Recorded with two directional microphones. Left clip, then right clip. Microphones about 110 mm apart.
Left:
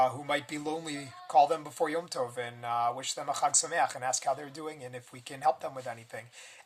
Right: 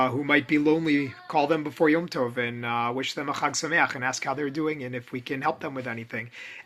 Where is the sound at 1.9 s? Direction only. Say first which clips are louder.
Right 8 dB; 30° left (ahead or behind).